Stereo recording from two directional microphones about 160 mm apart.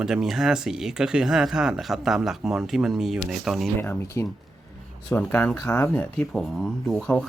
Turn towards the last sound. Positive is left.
turn(degrees=5)  # may be behind; listen again after turning